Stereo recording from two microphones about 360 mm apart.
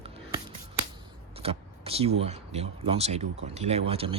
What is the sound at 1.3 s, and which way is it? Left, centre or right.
Speech, centre.